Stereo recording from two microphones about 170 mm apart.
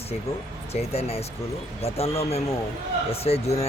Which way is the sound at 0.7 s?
35° left (ahead or behind).